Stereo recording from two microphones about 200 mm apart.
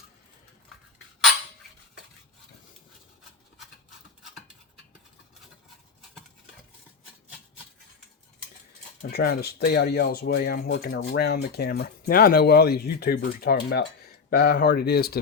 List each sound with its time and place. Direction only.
9.0 s speech: 50° left (ahead or behind)